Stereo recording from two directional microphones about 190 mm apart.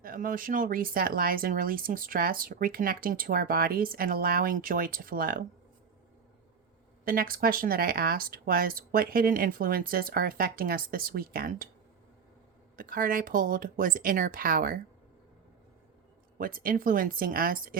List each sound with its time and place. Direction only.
0.0 s speech: 50° right (ahead or behind)
7.0 s speech: 50° right (ahead or behind)
12.7 s speech: 45° right (ahead or behind)
16.4 s speech: 50° right (ahead or behind)